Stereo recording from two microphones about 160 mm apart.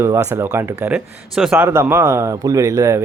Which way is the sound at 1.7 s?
15° right (ahead or behind).